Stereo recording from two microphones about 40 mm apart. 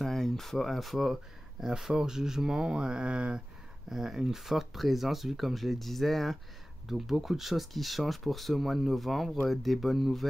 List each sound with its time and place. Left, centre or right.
0.0 s speech: centre
1.9 s speech: centre
3.9 s speech: centre
6.9 s speech: centre